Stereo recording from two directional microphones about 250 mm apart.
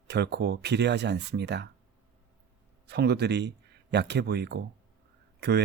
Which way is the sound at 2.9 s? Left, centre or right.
Right.